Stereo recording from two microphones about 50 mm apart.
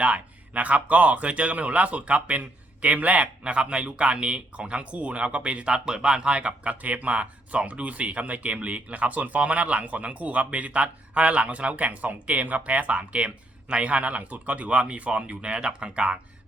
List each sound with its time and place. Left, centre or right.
0.0 s speech: right